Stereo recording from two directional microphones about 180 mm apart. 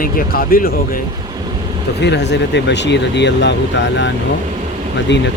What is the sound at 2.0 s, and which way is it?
Speech, 70° left (ahead or behind).